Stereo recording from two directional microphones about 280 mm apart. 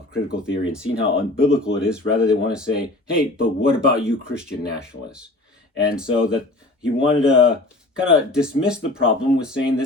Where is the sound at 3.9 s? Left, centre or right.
Centre.